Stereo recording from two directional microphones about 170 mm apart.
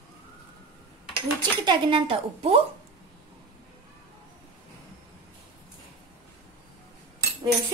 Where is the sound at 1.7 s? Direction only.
30° right (ahead or behind).